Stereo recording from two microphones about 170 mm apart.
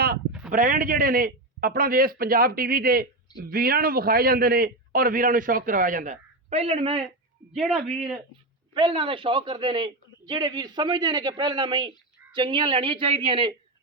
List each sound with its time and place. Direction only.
0.3 s a sound: 5° right (ahead or behind)
0.5 s a man's voice: 50° right (ahead or behind)
6.5 s a woman's voice: 35° right (ahead or behind)
7.5 s a man's voice: centre (ahead or behind)
8.7 s a man's voice: 30° right (ahead or behind)